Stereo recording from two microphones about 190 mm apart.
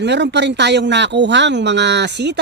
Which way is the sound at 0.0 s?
65° right (ahead or behind).